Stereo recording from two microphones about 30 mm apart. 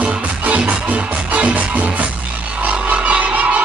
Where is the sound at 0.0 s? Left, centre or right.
Right.